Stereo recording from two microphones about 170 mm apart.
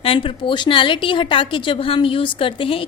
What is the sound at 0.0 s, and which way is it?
A woman's voice, 30° left (ahead or behind).